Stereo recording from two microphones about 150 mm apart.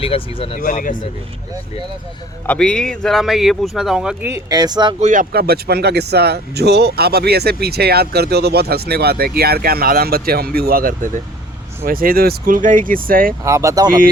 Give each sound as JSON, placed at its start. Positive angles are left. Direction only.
{"t": 0.0, "sound": "speech", "side_deg": 40}
{"t": 0.6, "sound": "speech", "side_deg": 60}
{"t": 2.5, "sound": "speech", "side_deg": 5}
{"t": 4.3, "sound": "speech", "side_deg": -20}
{"t": 4.9, "sound": "speech", "side_deg": -50}
{"t": 5.3, "sound": "speech", "side_deg": -90}
{"t": 13.4, "sound": "speech", "side_deg": -20}